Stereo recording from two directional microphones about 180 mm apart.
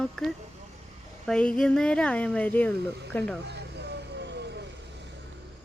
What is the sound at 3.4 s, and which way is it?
Vehicle, 70° right (ahead or behind).